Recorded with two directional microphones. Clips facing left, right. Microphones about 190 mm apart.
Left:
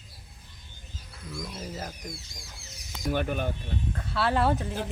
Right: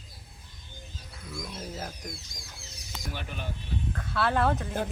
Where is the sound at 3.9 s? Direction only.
5° left (ahead or behind).